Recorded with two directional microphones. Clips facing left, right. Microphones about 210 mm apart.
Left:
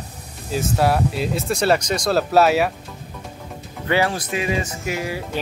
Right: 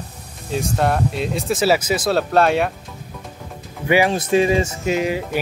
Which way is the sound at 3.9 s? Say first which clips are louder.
Right 5 dB; 15° right (ahead or behind).